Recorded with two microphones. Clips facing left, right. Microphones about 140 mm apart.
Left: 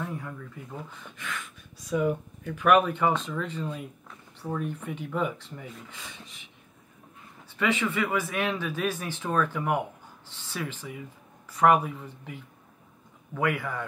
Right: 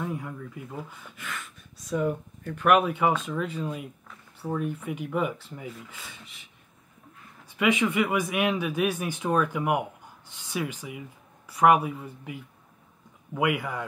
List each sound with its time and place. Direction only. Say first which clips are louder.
0.0 s speech: right 2 dB; 10° right (ahead or behind)
7.5 s speech: right 3 dB; 15° right (ahead or behind)